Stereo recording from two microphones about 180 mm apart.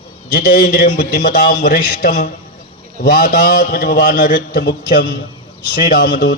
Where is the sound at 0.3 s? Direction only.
50° left (ahead or behind).